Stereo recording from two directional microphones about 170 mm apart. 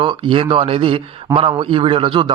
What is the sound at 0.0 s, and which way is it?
A man's voice, 30° right (ahead or behind).